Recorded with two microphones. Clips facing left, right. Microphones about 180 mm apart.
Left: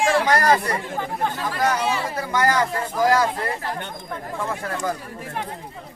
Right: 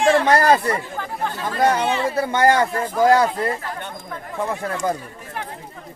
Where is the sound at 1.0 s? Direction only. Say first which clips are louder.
Left 1 dB; 15° left (ahead or behind).